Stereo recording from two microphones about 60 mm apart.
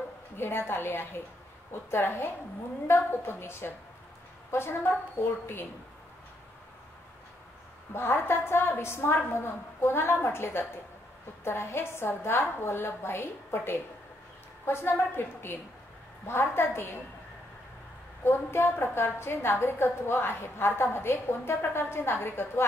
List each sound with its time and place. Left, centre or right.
0.4 s a woman's voice: left
7.9 s a woman's voice: left
18.2 s a woman's voice: left